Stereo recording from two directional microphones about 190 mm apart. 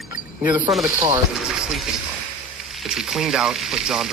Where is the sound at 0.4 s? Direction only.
10° right (ahead or behind).